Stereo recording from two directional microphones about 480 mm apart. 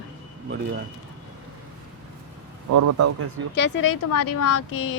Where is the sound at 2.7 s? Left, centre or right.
Right.